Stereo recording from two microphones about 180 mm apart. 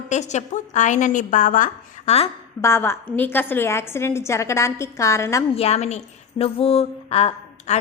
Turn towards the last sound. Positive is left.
turn(degrees=35)  # may be behind; listen again after turning